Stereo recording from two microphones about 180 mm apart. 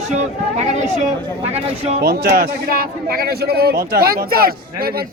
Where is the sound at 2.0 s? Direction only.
60° right (ahead or behind).